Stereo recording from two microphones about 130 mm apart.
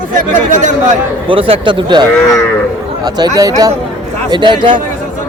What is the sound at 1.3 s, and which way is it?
Speech, 45° right (ahead or behind).